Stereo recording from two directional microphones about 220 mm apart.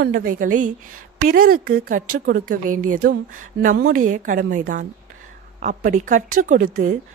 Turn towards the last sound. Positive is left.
turn(degrees=-40)  # may be behind; listen again after turning